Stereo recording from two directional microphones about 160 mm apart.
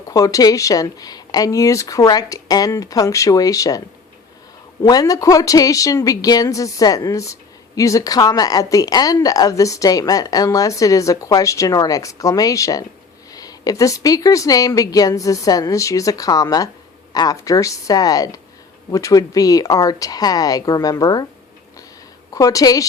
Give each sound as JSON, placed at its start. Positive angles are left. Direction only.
{"t": 0.1, "sound": "speech", "side_deg": 20}
{"t": 22.3, "sound": "speech", "side_deg": 20}